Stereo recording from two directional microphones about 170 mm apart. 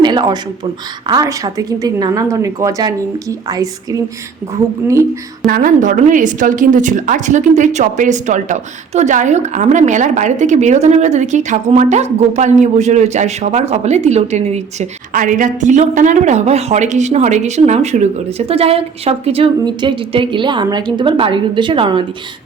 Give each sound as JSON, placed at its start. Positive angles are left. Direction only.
{"t": 0.0, "sound": "a sound", "side_deg": -25}
{"t": 1.0, "sound": "a woman's voice", "side_deg": -20}
{"t": 5.5, "sound": "a woman's voice", "side_deg": -55}